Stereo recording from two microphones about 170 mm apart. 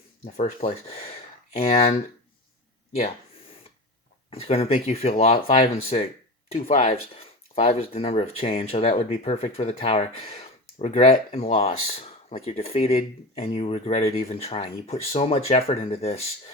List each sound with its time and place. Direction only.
0.3 s speech: 35° left (ahead or behind)
4.3 s speech: 35° left (ahead or behind)